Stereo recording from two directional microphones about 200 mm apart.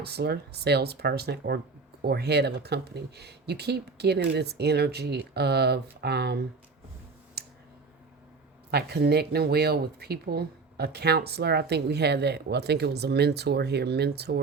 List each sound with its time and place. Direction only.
0.0 s speech: 55° right (ahead or behind)
8.7 s speech: 55° right (ahead or behind)